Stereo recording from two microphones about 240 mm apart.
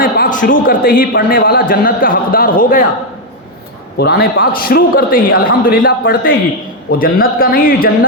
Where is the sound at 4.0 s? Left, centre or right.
Left.